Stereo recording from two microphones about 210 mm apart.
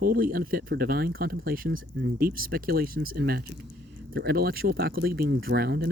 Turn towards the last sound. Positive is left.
turn(degrees=-50)  # may be behind; listen again after turning